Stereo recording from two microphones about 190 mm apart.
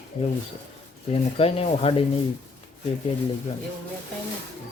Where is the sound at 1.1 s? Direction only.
30° left (ahead or behind).